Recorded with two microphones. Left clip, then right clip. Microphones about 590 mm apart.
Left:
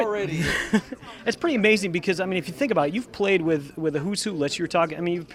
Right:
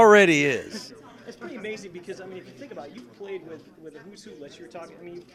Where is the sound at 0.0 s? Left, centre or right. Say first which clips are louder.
Right 11 dB; right.